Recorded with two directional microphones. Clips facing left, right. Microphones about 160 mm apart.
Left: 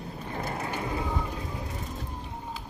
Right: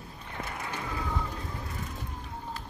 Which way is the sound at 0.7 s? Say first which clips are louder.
Left 1 dB; 25° left (ahead or behind).